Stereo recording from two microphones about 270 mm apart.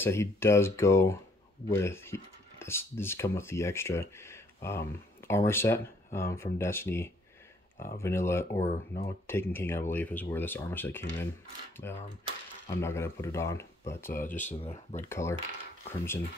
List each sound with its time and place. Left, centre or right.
0.0 s speech: centre
8.6 s speech: left
9.3 s speech: centre
14.1 s speech: left
15.0 s speech: centre